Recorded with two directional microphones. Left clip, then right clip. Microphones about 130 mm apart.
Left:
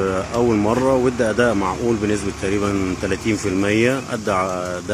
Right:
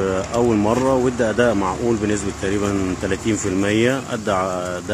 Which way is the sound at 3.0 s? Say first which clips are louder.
Left 1 dB; 30° right (ahead or behind).